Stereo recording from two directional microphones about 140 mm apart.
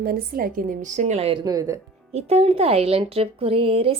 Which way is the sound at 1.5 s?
25° right (ahead or behind).